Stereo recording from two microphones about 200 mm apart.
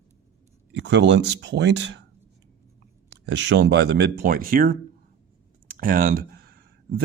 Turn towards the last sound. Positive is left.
turn(degrees=-50)  # may be behind; listen again after turning